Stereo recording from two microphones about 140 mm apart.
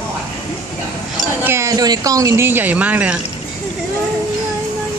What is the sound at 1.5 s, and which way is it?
Speech, 20° right (ahead or behind).